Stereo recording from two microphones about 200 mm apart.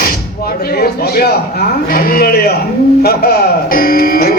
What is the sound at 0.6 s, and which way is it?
Speech, 50° left (ahead or behind).